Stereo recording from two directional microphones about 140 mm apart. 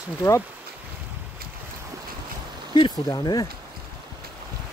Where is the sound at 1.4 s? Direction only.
90° right.